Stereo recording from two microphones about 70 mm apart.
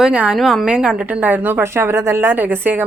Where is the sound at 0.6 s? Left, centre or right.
Centre.